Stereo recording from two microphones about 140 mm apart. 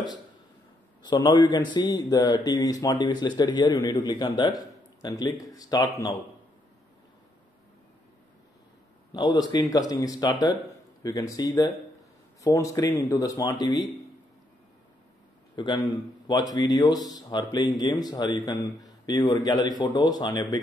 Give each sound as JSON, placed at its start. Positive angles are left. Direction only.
{"t": 1.0, "sound": "speech", "side_deg": 30}
{"t": 9.1, "sound": "speech", "side_deg": 30}
{"t": 15.5, "sound": "speech", "side_deg": 35}